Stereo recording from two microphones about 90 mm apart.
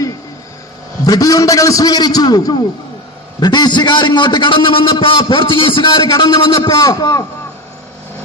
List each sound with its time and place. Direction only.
1.0 s a man's voice: 45° left (ahead or behind); by 6.7 s 65° left (ahead or behind)
6.7 s a man's voice: 45° left (ahead or behind)